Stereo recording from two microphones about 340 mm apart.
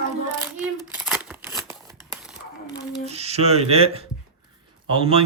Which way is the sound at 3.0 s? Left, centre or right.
Centre.